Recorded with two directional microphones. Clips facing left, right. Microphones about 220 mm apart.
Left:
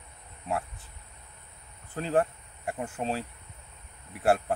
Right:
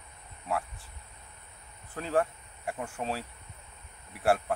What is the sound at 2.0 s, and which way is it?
Speech, 30° left (ahead or behind).